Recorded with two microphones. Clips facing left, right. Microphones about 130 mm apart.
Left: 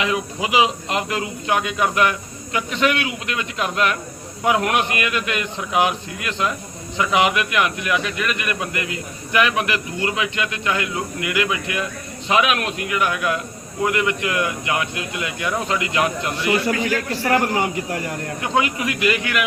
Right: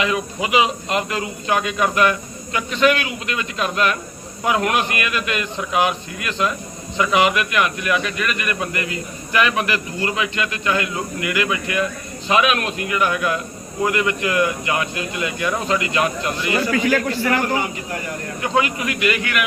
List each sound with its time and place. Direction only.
0.0 s speech: 20° left (ahead or behind)
18.4 s speech: 15° left (ahead or behind)